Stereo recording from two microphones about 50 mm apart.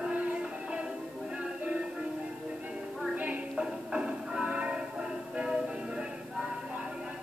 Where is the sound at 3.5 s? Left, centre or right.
Centre.